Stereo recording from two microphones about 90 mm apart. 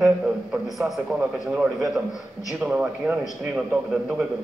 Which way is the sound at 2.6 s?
15° right (ahead or behind).